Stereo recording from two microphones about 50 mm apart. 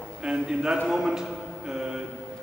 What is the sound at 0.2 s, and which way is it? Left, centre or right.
A man's voice, centre.